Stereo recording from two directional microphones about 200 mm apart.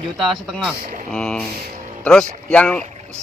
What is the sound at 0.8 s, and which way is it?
Speech, 45° right (ahead or behind).